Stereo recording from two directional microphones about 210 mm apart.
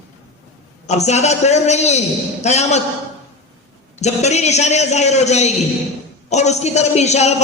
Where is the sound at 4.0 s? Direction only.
30° left (ahead or behind).